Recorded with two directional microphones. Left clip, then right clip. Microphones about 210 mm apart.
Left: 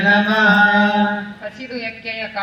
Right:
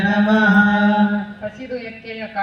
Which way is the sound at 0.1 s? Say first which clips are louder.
Left 4 dB; 55° right (ahead or behind).